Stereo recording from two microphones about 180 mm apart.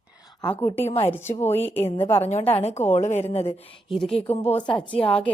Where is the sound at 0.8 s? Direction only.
30° left (ahead or behind).